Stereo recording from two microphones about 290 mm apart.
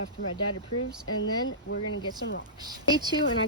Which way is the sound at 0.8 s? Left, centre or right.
Left.